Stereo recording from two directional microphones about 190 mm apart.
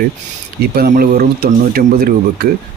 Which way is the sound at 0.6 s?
55° right (ahead or behind).